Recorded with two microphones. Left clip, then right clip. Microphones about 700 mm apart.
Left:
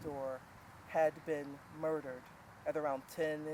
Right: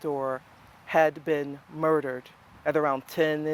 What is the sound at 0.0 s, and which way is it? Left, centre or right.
Vehicle, right.